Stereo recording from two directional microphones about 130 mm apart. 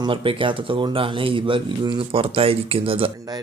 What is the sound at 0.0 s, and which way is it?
Speech, 40° right (ahead or behind).